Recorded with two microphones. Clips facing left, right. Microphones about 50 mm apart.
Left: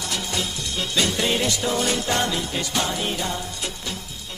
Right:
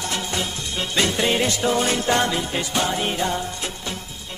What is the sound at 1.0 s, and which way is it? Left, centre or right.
Music, right.